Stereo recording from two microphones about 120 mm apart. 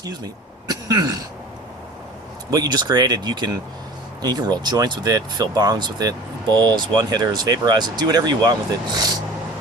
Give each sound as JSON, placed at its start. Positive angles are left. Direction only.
{"t": 0.0, "sound": "speech", "side_deg": -30}
{"t": 0.7, "sound": "throat clearing", "side_deg": -35}
{"t": 2.5, "sound": "speech", "side_deg": -30}